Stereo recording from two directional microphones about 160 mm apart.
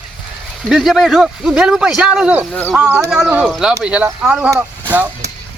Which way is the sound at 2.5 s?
10° left (ahead or behind).